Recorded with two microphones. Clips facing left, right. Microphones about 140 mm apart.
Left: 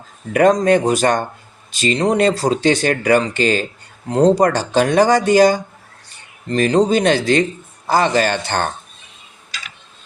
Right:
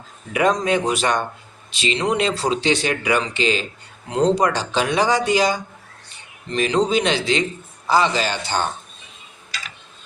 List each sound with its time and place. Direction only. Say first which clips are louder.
0.3 s speech: left 6 dB; 45° left (ahead or behind)